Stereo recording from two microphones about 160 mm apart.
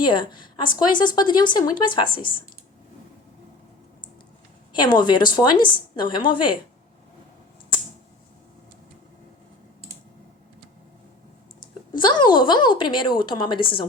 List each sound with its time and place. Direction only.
0.0 s a woman's voice: 30° left (ahead or behind)
4.7 s speech: 30° left (ahead or behind)
11.9 s speech: 30° left (ahead or behind)